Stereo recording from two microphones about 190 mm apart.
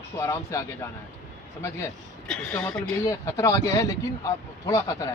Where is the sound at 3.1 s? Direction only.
15° left (ahead or behind).